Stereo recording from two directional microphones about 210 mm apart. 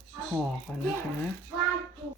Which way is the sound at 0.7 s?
Centre (ahead or behind).